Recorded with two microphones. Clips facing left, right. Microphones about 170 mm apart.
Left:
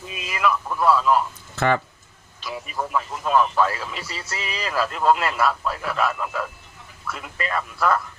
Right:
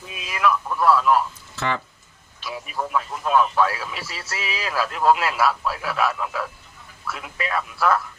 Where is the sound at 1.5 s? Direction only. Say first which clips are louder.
Left 5 dB; 55° left (ahead or behind).